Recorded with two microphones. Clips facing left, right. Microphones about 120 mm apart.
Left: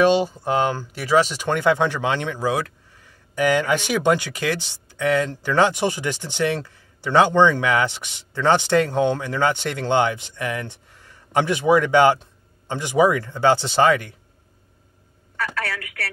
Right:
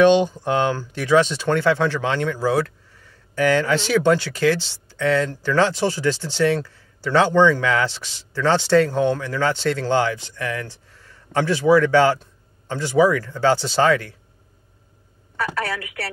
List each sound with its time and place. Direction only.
0.0 s speech: 5° left (ahead or behind)
15.3 s a woman's voice: 15° right (ahead or behind)